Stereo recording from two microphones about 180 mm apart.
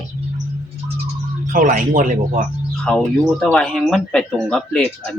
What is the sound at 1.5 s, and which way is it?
Speech, 50° right (ahead or behind).